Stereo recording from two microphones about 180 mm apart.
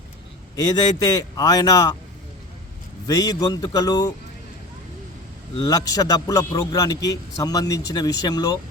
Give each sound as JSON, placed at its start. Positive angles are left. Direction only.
{"t": 0.5, "sound": "a man's voice", "side_deg": 20}
{"t": 3.1, "sound": "a man's voice", "side_deg": 20}
{"t": 5.5, "sound": "a man's voice", "side_deg": 20}